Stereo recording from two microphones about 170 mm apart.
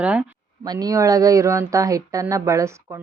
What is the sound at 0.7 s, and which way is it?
Speech, 20° right (ahead or behind).